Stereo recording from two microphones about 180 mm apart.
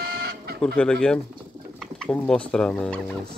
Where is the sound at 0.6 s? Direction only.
5° left (ahead or behind).